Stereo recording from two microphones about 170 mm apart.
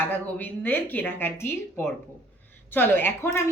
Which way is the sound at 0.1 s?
10° left (ahead or behind).